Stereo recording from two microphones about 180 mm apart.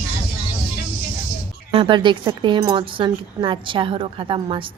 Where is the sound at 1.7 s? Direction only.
30° right (ahead or behind).